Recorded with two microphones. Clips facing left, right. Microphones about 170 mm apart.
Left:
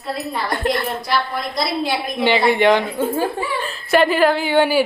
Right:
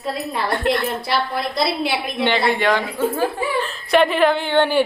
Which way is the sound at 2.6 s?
20° left (ahead or behind).